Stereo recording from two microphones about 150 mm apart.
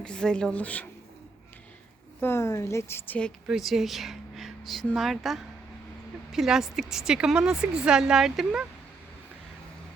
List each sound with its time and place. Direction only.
0.0 s a woman's voice: 5° left (ahead or behind)
2.2 s a woman's voice: 20° left (ahead or behind)
3.4 s a woman's voice: centre (ahead or behind)